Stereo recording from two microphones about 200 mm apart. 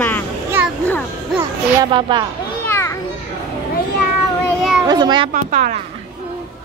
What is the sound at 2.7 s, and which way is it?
Children playing, 15° left (ahead or behind).